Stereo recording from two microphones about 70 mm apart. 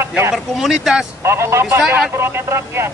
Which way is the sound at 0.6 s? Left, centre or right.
Centre.